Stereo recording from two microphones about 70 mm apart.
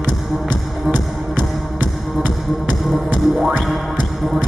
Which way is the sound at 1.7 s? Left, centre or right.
Right.